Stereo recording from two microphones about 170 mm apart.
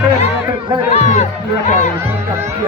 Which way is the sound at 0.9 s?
40° left (ahead or behind).